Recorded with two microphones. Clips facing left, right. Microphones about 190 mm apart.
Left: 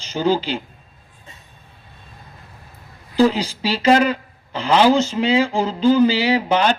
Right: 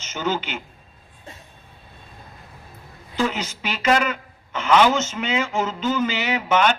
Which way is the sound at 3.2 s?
35° left (ahead or behind).